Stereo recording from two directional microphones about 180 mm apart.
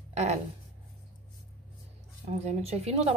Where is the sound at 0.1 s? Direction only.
35° right (ahead or behind).